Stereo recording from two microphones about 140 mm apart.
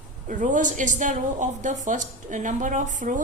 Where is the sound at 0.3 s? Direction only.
65° right (ahead or behind).